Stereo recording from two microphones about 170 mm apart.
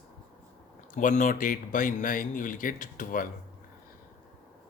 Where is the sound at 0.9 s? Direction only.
50° left (ahead or behind).